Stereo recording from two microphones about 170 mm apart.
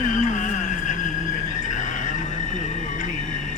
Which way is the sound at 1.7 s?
45° left (ahead or behind).